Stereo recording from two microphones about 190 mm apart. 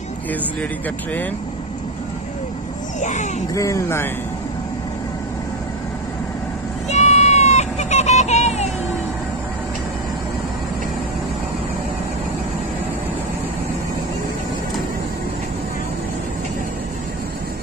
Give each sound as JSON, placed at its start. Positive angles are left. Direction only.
{"t": 3.0, "sound": "speech", "side_deg": 40}
{"t": 3.5, "sound": "speech", "side_deg": 15}
{"t": 6.9, "sound": "a sound", "side_deg": 35}